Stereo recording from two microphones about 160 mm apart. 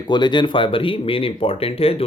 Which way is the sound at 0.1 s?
30° left (ahead or behind).